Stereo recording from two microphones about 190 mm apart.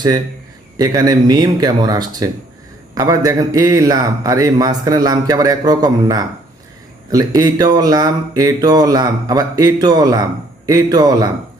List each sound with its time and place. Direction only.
0.8 s speech: 20° right (ahead or behind)